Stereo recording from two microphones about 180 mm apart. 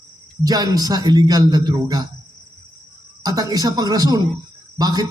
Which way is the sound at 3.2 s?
20° right (ahead or behind).